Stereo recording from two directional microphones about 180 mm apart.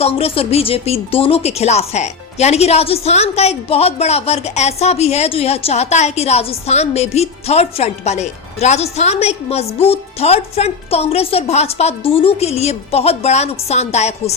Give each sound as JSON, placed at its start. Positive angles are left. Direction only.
{"t": 0.0, "sound": "speech", "side_deg": 30}